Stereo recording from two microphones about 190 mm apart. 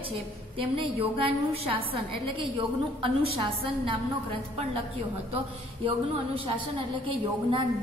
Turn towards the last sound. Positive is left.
turn(degrees=-25)  # may be behind; listen again after turning